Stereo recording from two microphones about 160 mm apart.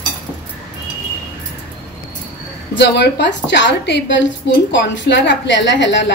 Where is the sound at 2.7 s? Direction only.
90° left.